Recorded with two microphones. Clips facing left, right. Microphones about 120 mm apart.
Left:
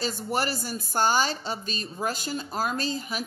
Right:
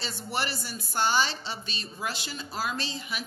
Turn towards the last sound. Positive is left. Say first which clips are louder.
# left 5 dB
turn(degrees=40)  # may be behind; listen again after turning